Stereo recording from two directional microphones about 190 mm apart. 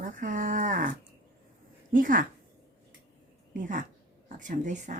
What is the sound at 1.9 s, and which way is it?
Speech, 45° right (ahead or behind).